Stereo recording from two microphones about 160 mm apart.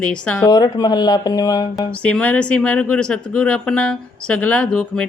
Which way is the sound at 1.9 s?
10° left (ahead or behind).